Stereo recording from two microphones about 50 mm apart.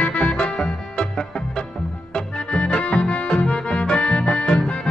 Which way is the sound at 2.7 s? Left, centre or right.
Left.